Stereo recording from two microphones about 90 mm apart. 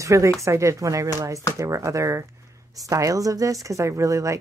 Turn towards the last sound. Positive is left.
turn(degrees=-35)  # may be behind; listen again after turning